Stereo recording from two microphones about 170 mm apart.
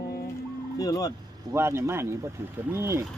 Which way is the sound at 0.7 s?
20° left (ahead or behind).